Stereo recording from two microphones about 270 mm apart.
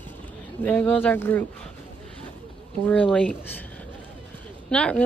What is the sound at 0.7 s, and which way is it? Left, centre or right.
Speech, centre.